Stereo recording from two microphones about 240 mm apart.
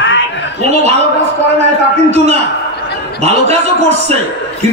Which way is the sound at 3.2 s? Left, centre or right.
Right.